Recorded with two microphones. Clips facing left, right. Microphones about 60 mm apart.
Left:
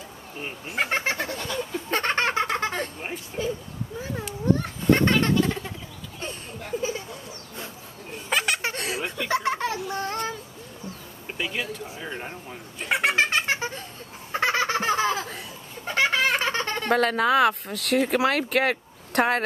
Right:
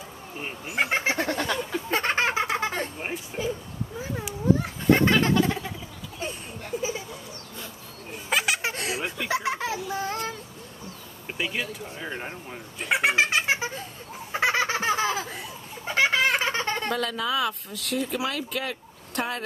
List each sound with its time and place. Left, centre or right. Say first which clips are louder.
0.4 s speech: right 1 dB; centre
1.3 s a sound: right 3 dB; right
1.9 s giggle: even; centre
3.0 s speech: even; centre
4.0 s a sound: even; centre
8.1 s baby laughter: even; centre
11.3 s speech: even; centre
14.3 s laughter: left 1 dB; centre
16.9 s speech: left 11 dB; left